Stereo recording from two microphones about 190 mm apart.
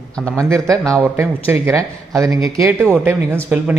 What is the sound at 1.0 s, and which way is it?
Speech, 10° right (ahead or behind).